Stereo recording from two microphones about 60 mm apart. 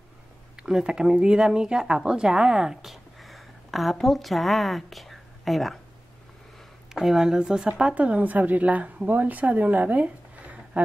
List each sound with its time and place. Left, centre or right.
0.6 s speech: centre
6.9 s a woman's voice: centre; by 10.8 s right